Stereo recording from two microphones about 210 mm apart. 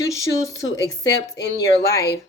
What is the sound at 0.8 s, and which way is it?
A woman's voice, 55° left (ahead or behind).